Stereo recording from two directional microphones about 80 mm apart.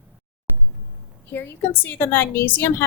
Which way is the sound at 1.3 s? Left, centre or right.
Left.